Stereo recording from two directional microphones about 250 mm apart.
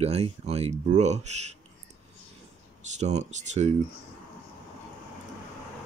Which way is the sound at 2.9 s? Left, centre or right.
Right.